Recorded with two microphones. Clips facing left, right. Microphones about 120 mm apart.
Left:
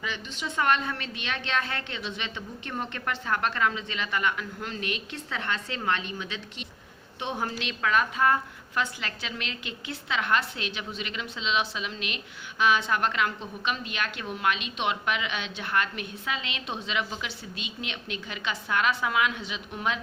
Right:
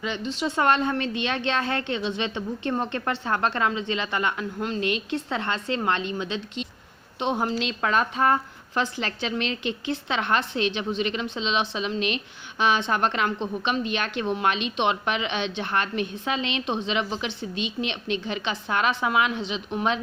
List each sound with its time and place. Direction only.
0.0 s a woman's voice: 25° right (ahead or behind)
7.7 s a woman's voice: 35° right (ahead or behind)